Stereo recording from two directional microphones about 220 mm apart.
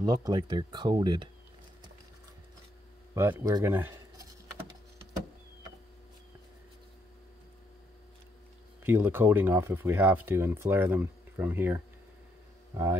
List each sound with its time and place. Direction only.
0.0 s speech: 20° right (ahead or behind)
3.2 s speech: 15° right (ahead or behind)
8.8 s speech: 10° right (ahead or behind)